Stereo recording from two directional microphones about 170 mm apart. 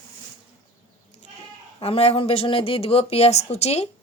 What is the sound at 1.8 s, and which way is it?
Speech, 35° left (ahead or behind).